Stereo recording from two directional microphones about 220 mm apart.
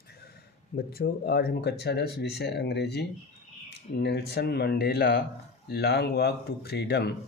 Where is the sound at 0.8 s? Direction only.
45° left (ahead or behind).